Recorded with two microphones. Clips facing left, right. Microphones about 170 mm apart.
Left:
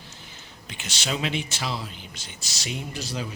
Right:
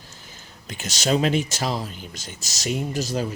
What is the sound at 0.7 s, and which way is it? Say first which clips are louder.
Speech: right 8 dB; 40° right (ahead or behind).